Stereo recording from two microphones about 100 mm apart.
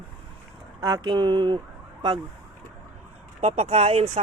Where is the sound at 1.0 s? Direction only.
50° right (ahead or behind).